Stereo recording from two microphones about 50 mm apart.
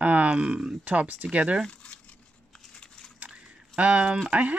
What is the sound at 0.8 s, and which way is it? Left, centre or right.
Speech, right.